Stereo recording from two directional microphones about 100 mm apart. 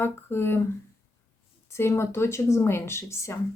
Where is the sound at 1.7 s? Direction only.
25° left (ahead or behind).